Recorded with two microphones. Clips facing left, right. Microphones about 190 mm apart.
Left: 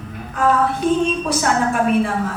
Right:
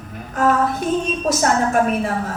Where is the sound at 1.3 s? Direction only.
45° right (ahead or behind).